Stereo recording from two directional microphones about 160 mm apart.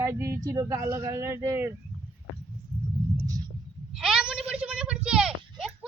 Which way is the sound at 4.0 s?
5° right (ahead or behind).